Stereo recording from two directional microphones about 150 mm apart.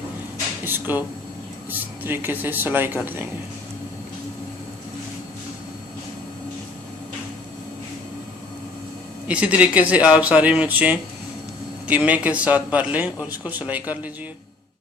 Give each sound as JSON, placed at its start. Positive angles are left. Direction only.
{"t": 0.6, "sound": "a sound", "side_deg": -15}
{"t": 1.7, "sound": "a man's voice", "side_deg": -15}
{"t": 9.2, "sound": "a man's voice", "side_deg": -10}